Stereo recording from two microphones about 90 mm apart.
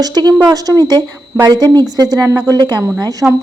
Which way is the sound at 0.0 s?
50° right (ahead or behind).